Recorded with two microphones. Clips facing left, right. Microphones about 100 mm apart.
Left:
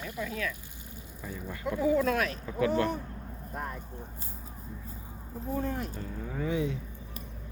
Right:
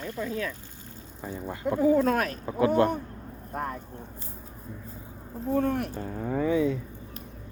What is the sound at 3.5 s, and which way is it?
Speech, 55° right (ahead or behind).